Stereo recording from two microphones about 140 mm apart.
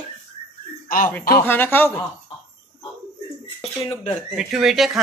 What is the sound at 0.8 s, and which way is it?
Speech, 80° left.